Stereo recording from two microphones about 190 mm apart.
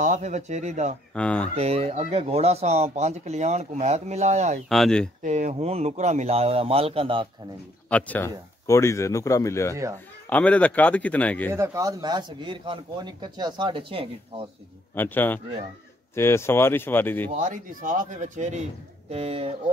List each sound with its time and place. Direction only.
0.0 s speech: 40° right (ahead or behind)
1.1 s speech: 5° left (ahead or behind)
1.5 s speech: 35° right (ahead or behind)
4.6 s speech: centre (ahead or behind)
5.2 s speech: 40° right (ahead or behind)
7.9 s speech: 10° left (ahead or behind)
11.5 s speech: 15° right (ahead or behind)
15.0 s speech: 10° left (ahead or behind)
17.3 s speech: 45° right (ahead or behind)